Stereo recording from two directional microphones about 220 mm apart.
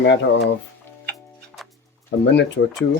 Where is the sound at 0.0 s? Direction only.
55° left (ahead or behind).